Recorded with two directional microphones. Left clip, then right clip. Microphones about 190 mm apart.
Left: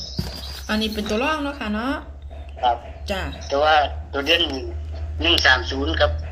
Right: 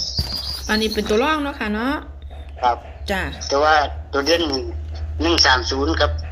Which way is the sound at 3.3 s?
10° right (ahead or behind).